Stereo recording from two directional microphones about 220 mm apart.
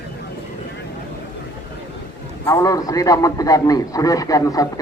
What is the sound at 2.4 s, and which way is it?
A man's voice, 15° left (ahead or behind).